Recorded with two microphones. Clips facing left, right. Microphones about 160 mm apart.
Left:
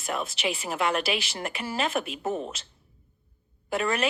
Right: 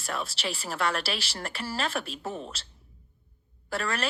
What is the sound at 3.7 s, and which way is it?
Speech, 20° left (ahead or behind).